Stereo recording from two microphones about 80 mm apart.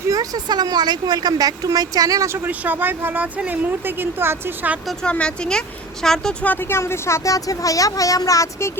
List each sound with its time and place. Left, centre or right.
0.1 s speech: right
2.5 s speech: right
5.0 s speech: centre
6.4 s speech: left